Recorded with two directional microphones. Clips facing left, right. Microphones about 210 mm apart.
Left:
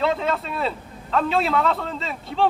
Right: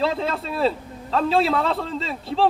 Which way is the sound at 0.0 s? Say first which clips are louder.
Left 1 dB; 35° right (ahead or behind).